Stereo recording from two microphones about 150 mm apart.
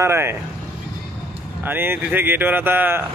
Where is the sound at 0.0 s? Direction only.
15° right (ahead or behind).